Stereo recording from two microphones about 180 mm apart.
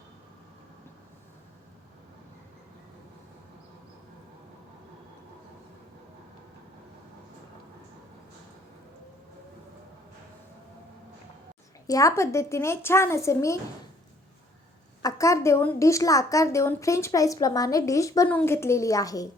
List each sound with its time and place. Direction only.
11.9 s a woman's voice: 20° left (ahead or behind)
15.0 s a woman's voice: 15° left (ahead or behind)